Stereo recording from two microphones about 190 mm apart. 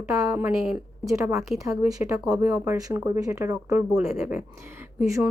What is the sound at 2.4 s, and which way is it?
Speech, 15° right (ahead or behind).